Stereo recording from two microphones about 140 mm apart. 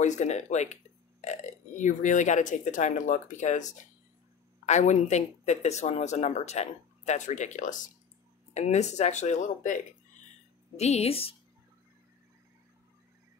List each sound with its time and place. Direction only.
0.0 s speech: 55° left (ahead or behind)
8.5 s speech: 55° left (ahead or behind)
10.8 s a woman's voice: 50° left (ahead or behind)